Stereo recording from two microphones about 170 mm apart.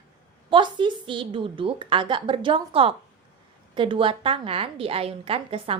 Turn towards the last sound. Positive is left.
turn(degrees=-35)  # may be behind; listen again after turning